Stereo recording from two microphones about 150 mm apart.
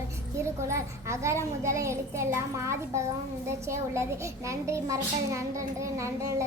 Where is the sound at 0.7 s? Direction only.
20° right (ahead or behind).